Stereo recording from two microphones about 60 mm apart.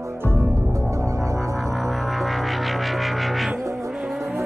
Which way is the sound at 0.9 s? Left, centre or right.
Right.